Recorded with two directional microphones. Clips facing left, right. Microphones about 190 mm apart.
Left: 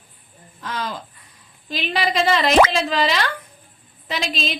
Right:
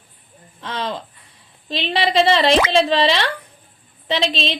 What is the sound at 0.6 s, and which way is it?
A woman's voice, 25° right (ahead or behind).